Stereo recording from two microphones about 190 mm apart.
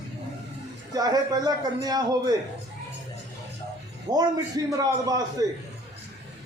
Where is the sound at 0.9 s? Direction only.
20° right (ahead or behind).